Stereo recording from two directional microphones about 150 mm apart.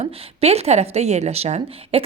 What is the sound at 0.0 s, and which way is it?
Speech, 40° right (ahead or behind).